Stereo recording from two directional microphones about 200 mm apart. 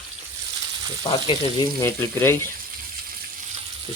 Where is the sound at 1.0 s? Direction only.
25° left (ahead or behind).